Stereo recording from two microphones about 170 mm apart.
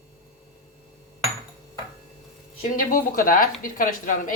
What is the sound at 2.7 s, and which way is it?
A woman's voice, 55° left (ahead or behind).